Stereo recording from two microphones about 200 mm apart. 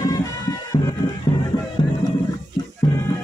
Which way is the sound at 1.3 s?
30° left (ahead or behind).